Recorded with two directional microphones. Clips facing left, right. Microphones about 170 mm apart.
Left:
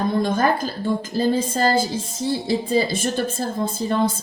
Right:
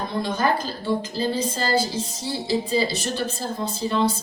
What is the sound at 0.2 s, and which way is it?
A woman's voice, 50° left (ahead or behind).